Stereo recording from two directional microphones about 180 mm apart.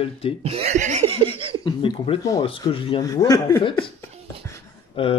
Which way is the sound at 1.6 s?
30° left (ahead or behind).